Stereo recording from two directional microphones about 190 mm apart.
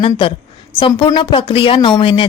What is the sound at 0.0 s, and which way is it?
Speech, 25° left (ahead or behind).